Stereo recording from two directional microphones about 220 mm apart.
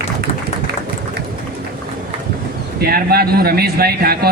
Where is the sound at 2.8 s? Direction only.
45° right (ahead or behind).